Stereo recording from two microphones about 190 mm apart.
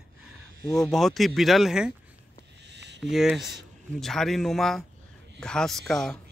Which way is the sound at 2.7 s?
65° right (ahead or behind).